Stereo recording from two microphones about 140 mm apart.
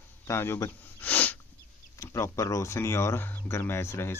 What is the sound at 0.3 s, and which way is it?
Speech, 20° left (ahead or behind).